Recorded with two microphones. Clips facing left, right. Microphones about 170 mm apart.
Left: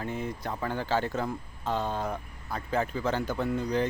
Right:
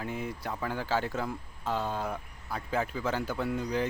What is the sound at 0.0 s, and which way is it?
Speech, 10° right (ahead or behind).